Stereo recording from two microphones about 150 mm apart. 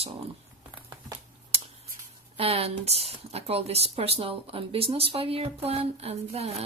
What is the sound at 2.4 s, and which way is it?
Speech, 40° right (ahead or behind).